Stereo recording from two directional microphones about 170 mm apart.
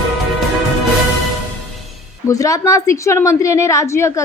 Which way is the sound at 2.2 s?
20° left (ahead or behind).